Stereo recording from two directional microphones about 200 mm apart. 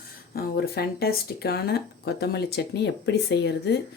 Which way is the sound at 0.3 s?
50° left (ahead or behind).